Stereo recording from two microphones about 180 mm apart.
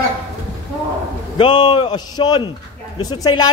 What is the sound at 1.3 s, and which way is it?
Speech, 25° left (ahead or behind).